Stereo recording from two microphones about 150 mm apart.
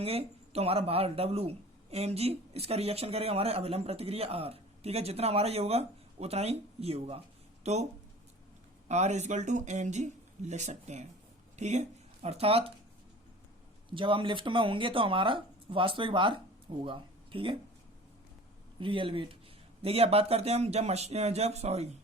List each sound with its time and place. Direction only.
0.0 s speech: 40° right (ahead or behind)
8.9 s speech: 50° right (ahead or behind)
13.9 s speech: 35° right (ahead or behind)
18.8 s speech: 35° right (ahead or behind)